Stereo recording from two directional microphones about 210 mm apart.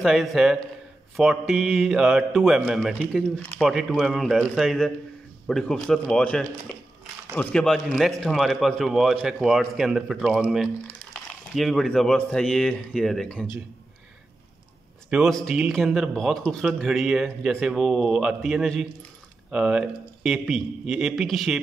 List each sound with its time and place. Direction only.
0.0 s speech: centre (ahead or behind)
15.0 s speech: centre (ahead or behind)